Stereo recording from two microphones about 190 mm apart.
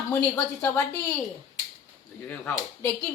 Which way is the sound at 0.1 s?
10° left (ahead or behind).